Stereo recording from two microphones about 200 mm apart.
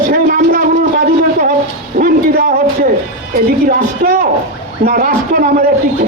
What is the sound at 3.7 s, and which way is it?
A man's voice, 45° right (ahead or behind).